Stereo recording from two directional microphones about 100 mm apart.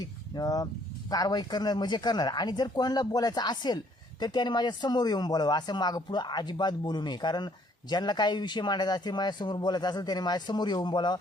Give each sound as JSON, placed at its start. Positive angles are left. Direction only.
{"t": 0.0, "sound": "speech", "side_deg": 40}